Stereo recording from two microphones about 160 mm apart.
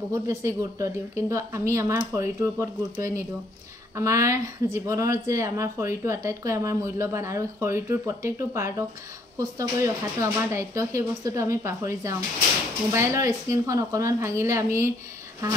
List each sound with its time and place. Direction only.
0.1 s speech: 20° right (ahead or behind)